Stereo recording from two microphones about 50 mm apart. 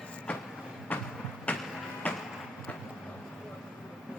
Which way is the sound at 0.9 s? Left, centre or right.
Left.